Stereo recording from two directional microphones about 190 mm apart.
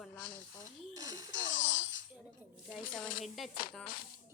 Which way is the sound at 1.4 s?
75° left (ahead or behind).